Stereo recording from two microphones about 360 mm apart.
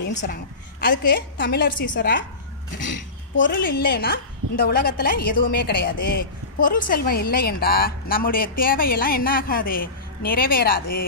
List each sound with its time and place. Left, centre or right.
0.0 s a woman's voice: left